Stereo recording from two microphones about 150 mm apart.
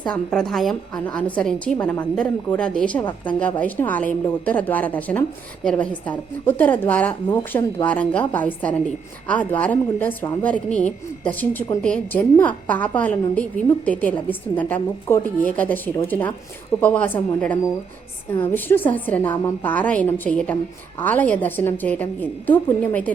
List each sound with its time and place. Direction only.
0.0 s a woman's voice: 5° left (ahead or behind)